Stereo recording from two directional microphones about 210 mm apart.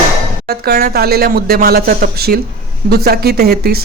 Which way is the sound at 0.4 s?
45° right (ahead or behind).